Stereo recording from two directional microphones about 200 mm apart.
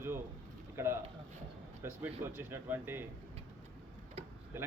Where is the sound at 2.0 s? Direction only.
10° right (ahead or behind).